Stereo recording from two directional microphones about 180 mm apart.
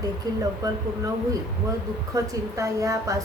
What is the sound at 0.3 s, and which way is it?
Speech, 20° right (ahead or behind).